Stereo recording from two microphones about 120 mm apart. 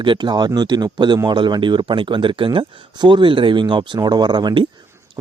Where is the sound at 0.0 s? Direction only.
40° right (ahead or behind).